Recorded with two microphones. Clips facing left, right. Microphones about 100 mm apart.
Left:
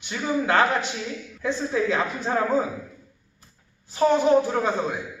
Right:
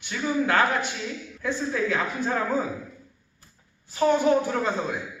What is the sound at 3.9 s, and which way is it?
Speech, 20° left (ahead or behind).